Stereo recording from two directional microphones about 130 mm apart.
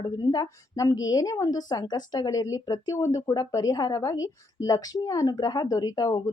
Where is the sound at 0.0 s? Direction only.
30° left (ahead or behind).